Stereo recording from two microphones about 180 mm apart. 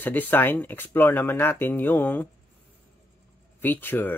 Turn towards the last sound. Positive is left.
turn(degrees=10)  # may be behind; listen again after turning